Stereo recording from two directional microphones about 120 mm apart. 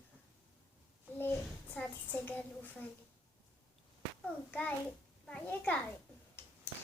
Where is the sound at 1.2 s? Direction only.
15° left (ahead or behind).